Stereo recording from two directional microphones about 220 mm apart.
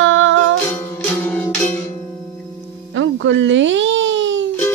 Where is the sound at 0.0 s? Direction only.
65° right (ahead or behind).